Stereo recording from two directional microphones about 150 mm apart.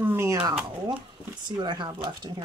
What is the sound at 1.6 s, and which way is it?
Speech, 30° right (ahead or behind).